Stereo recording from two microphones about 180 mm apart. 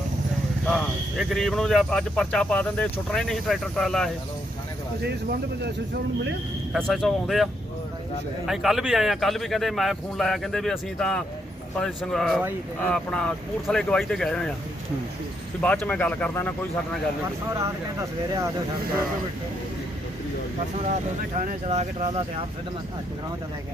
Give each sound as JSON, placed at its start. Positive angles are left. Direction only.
{"t": 0.7, "sound": "speech", "side_deg": 0}
{"t": 6.8, "sound": "speech", "side_deg": 0}
{"t": 8.4, "sound": "speech", "side_deg": 0}
{"t": 15.6, "sound": "speech", "side_deg": 5}
{"t": 17.5, "sound": "speech", "side_deg": -15}
{"t": 21.3, "sound": "speech", "side_deg": -40}